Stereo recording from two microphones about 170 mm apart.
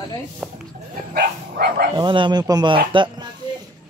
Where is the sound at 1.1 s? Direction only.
65° right (ahead or behind).